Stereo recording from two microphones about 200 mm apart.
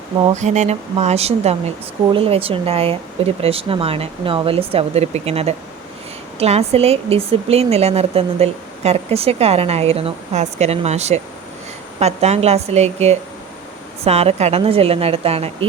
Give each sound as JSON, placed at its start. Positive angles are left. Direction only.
{"t": 0.3, "sound": "speech", "side_deg": -35}